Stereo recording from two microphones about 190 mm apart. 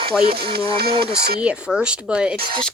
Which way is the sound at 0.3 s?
55° right (ahead or behind).